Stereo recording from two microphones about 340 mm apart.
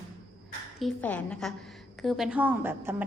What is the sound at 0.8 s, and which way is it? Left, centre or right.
A woman's voice, centre.